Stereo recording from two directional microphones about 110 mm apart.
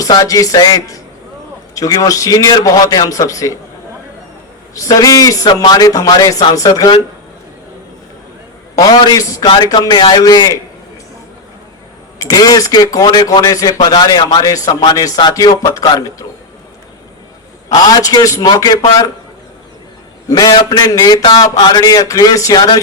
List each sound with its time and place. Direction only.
0.0 s speech: 30° left (ahead or behind)
4.7 s speech: 35° left (ahead or behind)
8.8 s speech: 35° left (ahead or behind)
12.2 s speech: 35° left (ahead or behind)
17.7 s speech: 35° left (ahead or behind)
20.2 s speech: 35° left (ahead or behind)